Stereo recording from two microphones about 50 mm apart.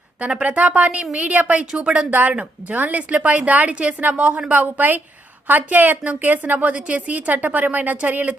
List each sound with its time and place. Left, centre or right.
0.2 s a woman's voice: right
4.6 s speech: right